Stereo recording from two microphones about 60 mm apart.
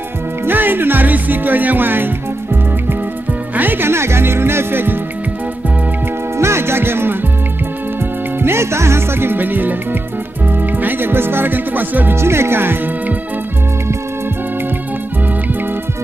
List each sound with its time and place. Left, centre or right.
0.5 s music: right
3.5 s music: right
6.3 s music: right
8.4 s music: right
10.6 s speech: right
12.2 s speech: right